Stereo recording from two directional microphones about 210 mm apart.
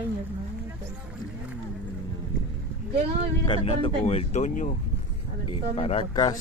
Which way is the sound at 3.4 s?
25° left (ahead or behind).